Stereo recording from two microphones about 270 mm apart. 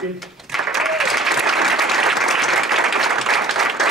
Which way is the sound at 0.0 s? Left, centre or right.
Centre.